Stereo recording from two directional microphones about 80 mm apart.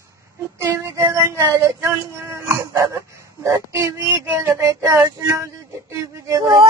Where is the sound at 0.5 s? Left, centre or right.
Right.